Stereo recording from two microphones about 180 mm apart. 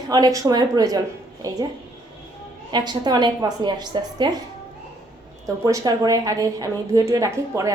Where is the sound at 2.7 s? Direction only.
25° right (ahead or behind).